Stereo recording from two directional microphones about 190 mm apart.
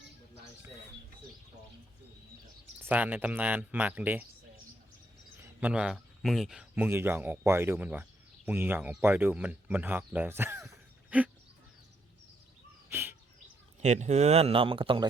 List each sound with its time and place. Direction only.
2.9 s speech: 10° right (ahead or behind)
5.4 s speech: 10° right (ahead or behind)
12.9 s bird: 10° right (ahead or behind)
13.8 s speech: 35° right (ahead or behind)